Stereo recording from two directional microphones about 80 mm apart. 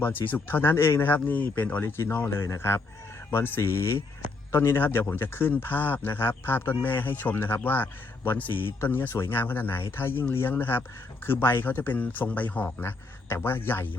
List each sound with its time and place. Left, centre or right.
0.0 s speech: left